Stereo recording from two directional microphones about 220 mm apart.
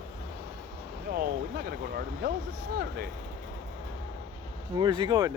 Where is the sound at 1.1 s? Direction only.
45° right (ahead or behind).